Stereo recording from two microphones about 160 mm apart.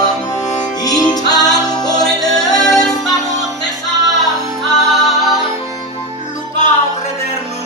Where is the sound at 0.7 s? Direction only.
25° left (ahead or behind).